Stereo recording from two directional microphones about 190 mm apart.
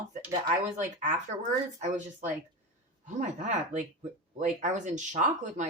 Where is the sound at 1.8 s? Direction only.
40° right (ahead or behind).